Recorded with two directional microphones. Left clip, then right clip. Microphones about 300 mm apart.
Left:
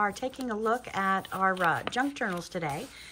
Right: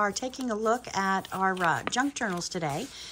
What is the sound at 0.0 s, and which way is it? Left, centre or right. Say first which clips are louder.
A woman's voice: right 1 dB; centre.